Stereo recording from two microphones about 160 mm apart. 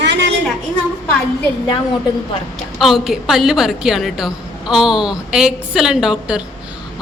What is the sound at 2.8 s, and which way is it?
A woman's voice, centre (ahead or behind).